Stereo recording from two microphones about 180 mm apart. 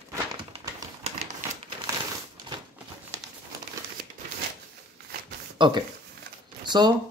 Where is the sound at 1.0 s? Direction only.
35° right (ahead or behind).